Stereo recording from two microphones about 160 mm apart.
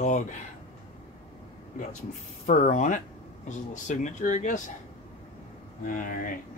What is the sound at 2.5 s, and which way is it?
Speech, 50° left (ahead or behind).